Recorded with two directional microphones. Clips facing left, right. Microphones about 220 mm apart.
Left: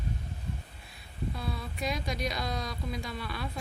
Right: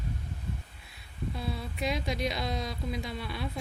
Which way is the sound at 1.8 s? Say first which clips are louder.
Right 2 dB; 25° right (ahead or behind).